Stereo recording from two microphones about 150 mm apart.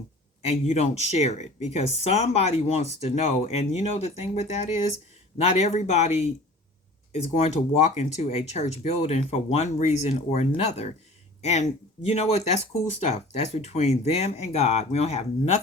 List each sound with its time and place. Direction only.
0.4 s speech: 50° left (ahead or behind)
12.0 s speech: 45° left (ahead or behind)